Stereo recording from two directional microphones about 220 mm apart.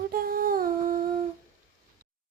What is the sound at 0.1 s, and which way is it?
Humming, 40° right (ahead or behind).